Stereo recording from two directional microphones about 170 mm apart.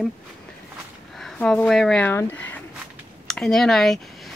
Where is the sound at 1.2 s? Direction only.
5° left (ahead or behind).